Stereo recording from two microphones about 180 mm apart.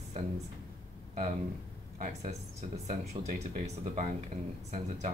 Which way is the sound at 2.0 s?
40° right (ahead or behind).